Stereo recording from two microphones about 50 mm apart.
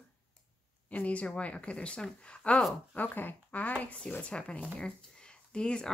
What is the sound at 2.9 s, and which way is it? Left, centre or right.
Speech, left.